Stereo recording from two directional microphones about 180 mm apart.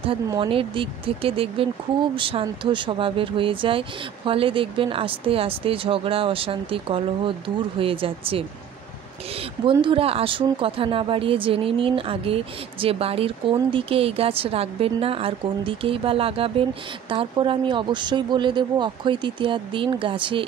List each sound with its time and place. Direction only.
0.3 s speech: 30° right (ahead or behind)
9.7 s speech: 30° right (ahead or behind)